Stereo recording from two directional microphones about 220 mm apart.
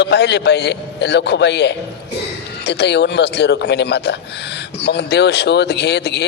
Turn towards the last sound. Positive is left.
turn(degrees=50)  # may be behind; listen again after turning